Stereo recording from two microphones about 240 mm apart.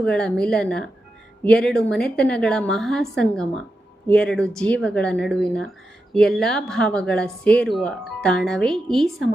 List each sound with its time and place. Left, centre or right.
0.0 s speech: centre